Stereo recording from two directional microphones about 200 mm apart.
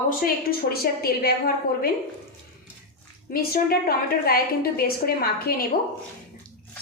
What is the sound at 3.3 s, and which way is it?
A woman's voice, 50° left (ahead or behind).